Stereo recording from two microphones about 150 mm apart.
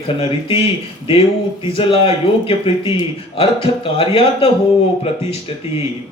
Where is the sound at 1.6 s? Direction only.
40° left (ahead or behind).